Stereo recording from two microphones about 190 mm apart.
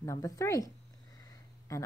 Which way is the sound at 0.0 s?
15° left (ahead or behind).